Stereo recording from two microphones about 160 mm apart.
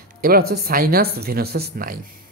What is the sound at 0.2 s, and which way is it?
Speech, 70° right (ahead or behind).